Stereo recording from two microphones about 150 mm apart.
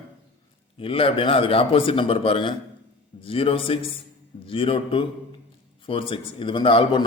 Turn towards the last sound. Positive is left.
turn(degrees=35)  # may be behind; listen again after turning